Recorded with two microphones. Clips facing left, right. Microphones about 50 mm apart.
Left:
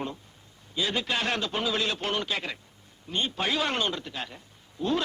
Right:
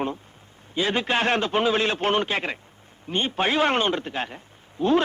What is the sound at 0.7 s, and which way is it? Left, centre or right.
A man's voice, right.